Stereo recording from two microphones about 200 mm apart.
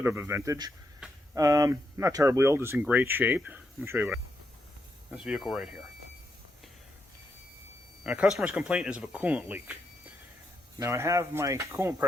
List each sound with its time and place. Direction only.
0.0 s speech: 10° right (ahead or behind)
1.0 s a sound: 5° right (ahead or behind)
1.4 s speech: 15° right (ahead or behind)
8.0 s speech: 5° right (ahead or behind)
10.8 s speech: 15° right (ahead or behind)